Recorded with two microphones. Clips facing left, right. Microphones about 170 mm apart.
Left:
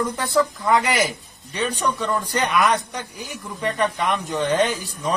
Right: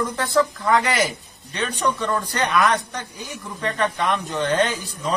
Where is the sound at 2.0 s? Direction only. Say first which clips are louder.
Even; 20° left (ahead or behind).